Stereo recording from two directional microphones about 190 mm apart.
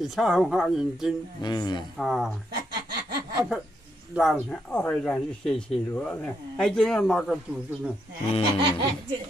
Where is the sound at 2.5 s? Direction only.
55° right (ahead or behind).